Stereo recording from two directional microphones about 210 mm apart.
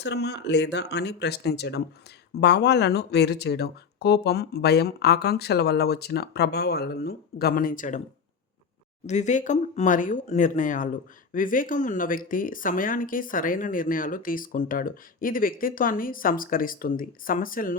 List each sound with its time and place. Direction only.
0.0 s speech: 55° left (ahead or behind); by 8.0 s 35° left (ahead or behind)
9.0 s speech: 35° left (ahead or behind)